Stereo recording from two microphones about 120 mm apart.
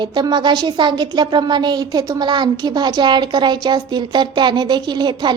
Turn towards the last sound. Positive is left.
turn(degrees=-35)  # may be behind; listen again after turning